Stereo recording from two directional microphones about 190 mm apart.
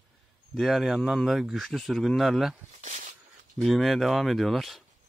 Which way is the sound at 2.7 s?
40° right (ahead or behind).